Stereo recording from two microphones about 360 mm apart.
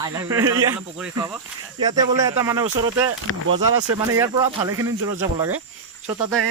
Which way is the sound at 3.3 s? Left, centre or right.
Left.